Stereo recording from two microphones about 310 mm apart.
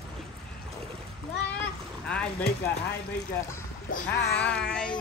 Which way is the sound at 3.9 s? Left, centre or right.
Left.